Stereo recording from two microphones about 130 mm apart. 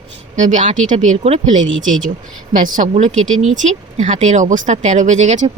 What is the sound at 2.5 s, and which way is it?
Speech, 90° right.